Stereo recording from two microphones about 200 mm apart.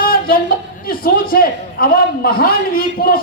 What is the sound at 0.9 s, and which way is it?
A man's voice, 45° left (ahead or behind).